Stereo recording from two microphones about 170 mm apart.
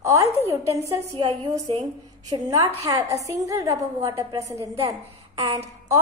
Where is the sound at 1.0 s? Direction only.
40° right (ahead or behind).